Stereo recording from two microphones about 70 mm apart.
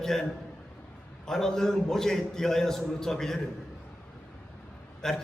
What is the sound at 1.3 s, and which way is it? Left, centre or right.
A man's voice, centre.